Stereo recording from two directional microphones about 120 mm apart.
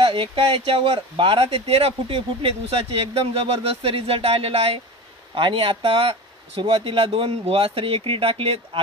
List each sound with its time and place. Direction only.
0.0 s speech: 45° right (ahead or behind)